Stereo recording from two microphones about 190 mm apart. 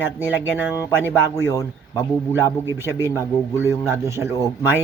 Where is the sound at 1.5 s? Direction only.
15° left (ahead or behind).